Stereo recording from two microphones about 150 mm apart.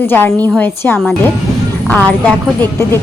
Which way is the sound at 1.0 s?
5° left (ahead or behind).